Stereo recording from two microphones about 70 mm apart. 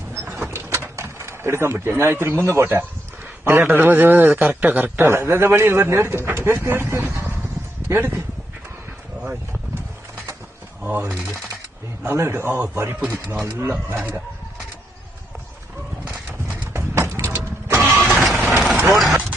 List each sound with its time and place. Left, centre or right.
0.1 s a sound: right
0.5 s a sound: right
2.0 s a man's voice: right
7.0 s vehicle: right
7.9 s speech: right
9.2 s a man's voice: right
12.0 s speech: right
16.7 s vehicle: right
18.0 s music: centre
18.9 s vehicle: centre